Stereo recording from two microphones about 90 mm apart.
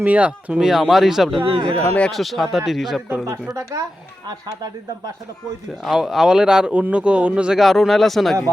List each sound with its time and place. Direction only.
0.0 s speech: 15° right (ahead or behind)
1.4 s speech: 75° right (ahead or behind)
1.7 s speech: 15° left (ahead or behind)
2.1 s speech: centre (ahead or behind)
3.5 s speech: 40° right (ahead or behind)
5.8 s speech: centre (ahead or behind)
7.6 s speech: centre (ahead or behind)